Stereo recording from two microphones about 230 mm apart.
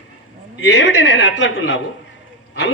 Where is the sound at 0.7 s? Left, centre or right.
Left.